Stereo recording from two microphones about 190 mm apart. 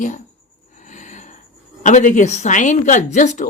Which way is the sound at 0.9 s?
40° left (ahead or behind).